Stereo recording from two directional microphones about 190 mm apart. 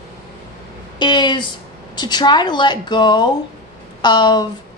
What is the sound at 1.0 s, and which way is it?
A woman's voice, 25° left (ahead or behind).